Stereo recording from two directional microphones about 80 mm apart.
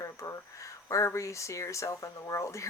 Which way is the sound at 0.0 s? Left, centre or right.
Left.